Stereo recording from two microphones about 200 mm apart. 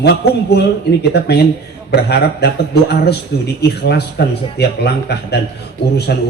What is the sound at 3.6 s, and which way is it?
A man's voice, 55° left (ahead or behind).